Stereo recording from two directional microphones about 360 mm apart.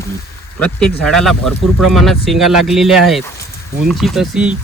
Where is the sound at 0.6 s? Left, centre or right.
Centre.